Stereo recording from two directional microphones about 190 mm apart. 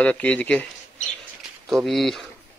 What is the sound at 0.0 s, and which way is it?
Speech, 5° left (ahead or behind).